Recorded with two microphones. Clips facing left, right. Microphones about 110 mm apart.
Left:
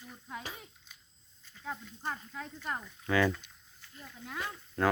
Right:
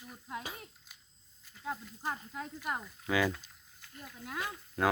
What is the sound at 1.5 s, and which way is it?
Speech, 10° right (ahead or behind).